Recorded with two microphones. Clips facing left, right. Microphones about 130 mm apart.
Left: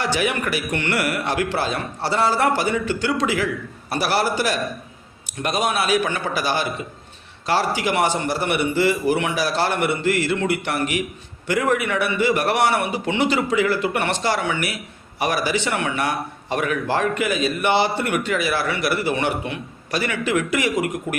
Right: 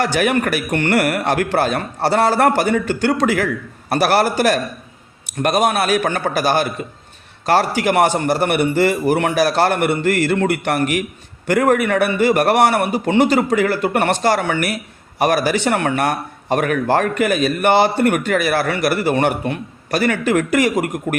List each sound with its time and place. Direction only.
0.0 s a man's voice: 50° right (ahead or behind)